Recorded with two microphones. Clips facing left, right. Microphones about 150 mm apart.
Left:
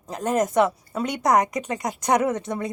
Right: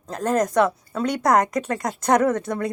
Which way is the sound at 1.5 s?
20° left (ahead or behind).